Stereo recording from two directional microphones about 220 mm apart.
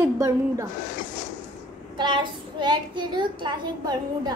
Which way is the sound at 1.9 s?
20° right (ahead or behind).